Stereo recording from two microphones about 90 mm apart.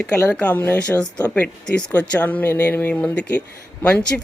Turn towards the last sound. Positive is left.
turn(degrees=15)  # may be behind; listen again after turning